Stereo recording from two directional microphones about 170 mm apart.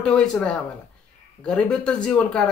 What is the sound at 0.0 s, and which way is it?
Speech, 5° left (ahead or behind).